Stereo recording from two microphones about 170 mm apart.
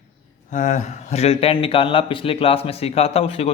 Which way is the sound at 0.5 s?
45° left (ahead or behind).